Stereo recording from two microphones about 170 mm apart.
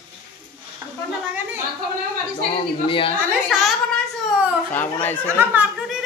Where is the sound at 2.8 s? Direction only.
30° left (ahead or behind).